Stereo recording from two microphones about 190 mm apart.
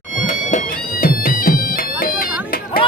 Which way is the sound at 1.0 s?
50° left (ahead or behind).